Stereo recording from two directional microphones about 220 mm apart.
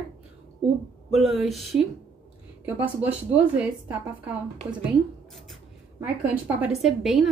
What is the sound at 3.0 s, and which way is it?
A woman's voice, 5° right (ahead or behind).